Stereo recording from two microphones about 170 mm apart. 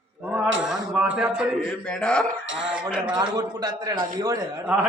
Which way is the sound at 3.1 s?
20° right (ahead or behind).